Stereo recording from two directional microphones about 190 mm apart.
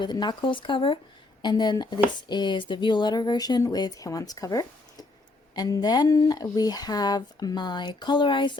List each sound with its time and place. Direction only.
0.0 s speech: 25° left (ahead or behind)